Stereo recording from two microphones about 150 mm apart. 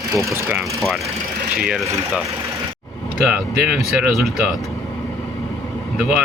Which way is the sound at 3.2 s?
5° right (ahead or behind).